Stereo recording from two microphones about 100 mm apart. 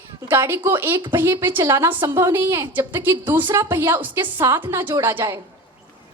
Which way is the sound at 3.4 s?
50° right (ahead or behind).